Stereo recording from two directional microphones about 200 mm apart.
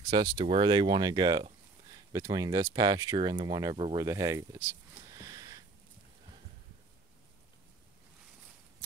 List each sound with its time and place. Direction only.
0.0 s speech: 20° right (ahead or behind)
5.1 s sniff: 20° right (ahead or behind)